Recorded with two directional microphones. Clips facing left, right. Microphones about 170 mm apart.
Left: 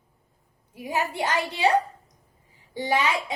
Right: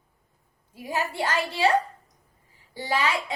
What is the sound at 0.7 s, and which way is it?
A woman's voice, 20° left (ahead or behind).